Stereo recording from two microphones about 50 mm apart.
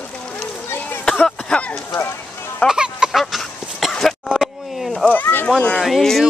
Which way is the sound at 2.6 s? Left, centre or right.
Centre.